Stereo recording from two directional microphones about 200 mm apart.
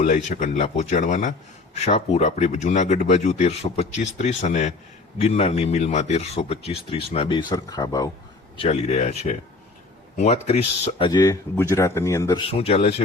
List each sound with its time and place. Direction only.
0.0 s speech: 40° left (ahead or behind); by 8.1 s 20° left (ahead or behind)
8.5 s speech: 30° left (ahead or behind)
12.5 s speech: 30° left (ahead or behind)